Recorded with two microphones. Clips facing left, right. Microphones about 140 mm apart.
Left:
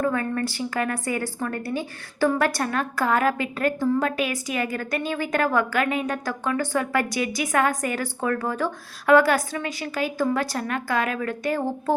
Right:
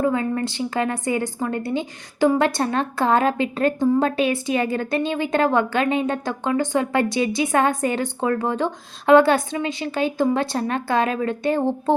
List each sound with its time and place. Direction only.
0.0 s a woman's voice: 20° right (ahead or behind)